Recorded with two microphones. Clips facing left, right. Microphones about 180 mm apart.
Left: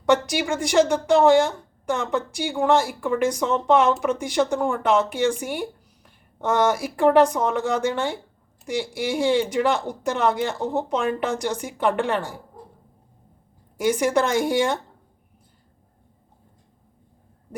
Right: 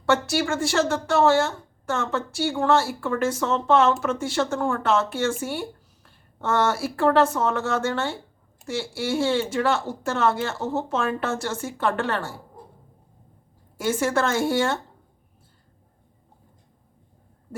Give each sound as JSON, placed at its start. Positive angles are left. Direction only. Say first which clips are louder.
{"t": 0.0, "sound": "speech", "louder": "left 2 dB", "side_deg": 15}
{"t": 13.7, "sound": "speech", "louder": "left 3 dB", "side_deg": 15}